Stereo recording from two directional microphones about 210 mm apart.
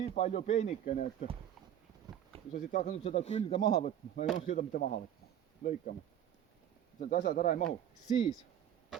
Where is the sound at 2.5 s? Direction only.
40° left (ahead or behind); by 3.9 s 25° left (ahead or behind).